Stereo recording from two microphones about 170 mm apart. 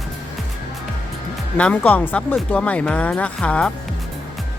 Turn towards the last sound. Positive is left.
turn(degrees=5)  # may be behind; listen again after turning